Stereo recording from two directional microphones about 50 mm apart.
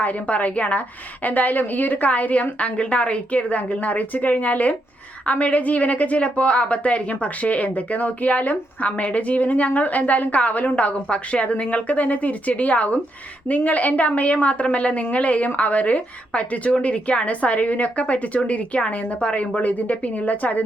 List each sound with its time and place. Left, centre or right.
0.0 s a woman's voice: left